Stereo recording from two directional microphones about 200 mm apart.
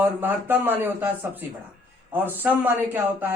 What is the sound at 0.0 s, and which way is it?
Speech, 10° right (ahead or behind).